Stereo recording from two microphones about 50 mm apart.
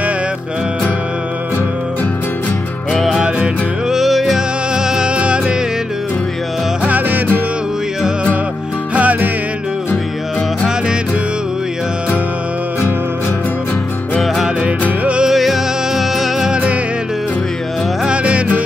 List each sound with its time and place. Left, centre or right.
2.9 s music: centre
3.3 s music: right
3.9 s music: centre
6.8 s music: right
8.9 s music: right
15.2 s music: centre
18.0 s music: right